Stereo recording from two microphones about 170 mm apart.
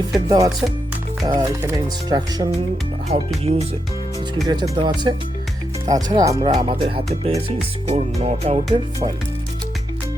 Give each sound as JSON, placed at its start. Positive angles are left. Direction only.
{"t": 0.3, "sound": "speech", "side_deg": -20}
{"t": 3.1, "sound": "music", "side_deg": -40}
{"t": 4.4, "sound": "speech", "side_deg": -20}
{"t": 4.7, "sound": "music", "side_deg": -30}
{"t": 5.8, "sound": "speech", "side_deg": -20}
{"t": 6.5, "sound": "music", "side_deg": -30}